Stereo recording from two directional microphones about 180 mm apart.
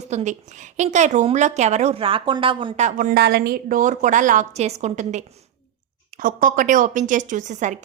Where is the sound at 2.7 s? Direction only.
45° right (ahead or behind).